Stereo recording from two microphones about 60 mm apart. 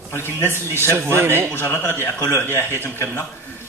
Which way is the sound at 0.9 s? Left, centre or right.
Right.